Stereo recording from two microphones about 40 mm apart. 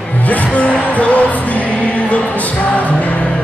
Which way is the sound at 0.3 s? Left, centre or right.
Left.